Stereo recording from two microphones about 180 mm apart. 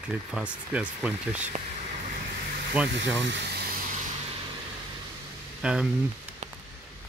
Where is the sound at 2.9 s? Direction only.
85° right; by 3.6 s 70° right (ahead or behind).